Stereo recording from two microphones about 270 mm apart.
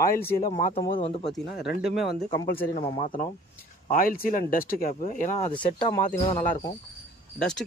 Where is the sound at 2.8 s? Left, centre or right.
Left.